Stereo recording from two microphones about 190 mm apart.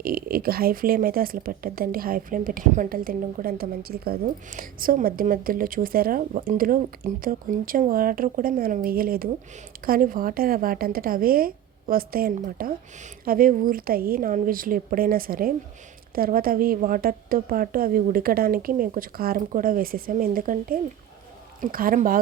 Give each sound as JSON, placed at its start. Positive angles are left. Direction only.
{"t": 0.0, "sound": "speech", "side_deg": -50}